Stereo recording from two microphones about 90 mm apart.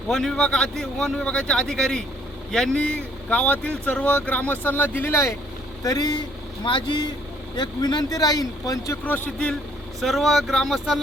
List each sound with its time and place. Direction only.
0.1 s speech: 5° left (ahead or behind); by 5.3 s 25° left (ahead or behind)
5.8 s speech: 45° left (ahead or behind)
6.7 s speech: 60° left (ahead or behind); by 9.0 s 40° left (ahead or behind)
9.0 s speech: 20° left (ahead or behind)
10.0 s speech: centre (ahead or behind)